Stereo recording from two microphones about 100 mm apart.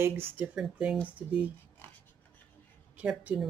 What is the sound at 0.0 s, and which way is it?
Speech, 20° right (ahead or behind).